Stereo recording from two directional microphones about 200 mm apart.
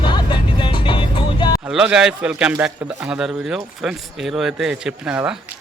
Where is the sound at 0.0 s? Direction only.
25° left (ahead or behind).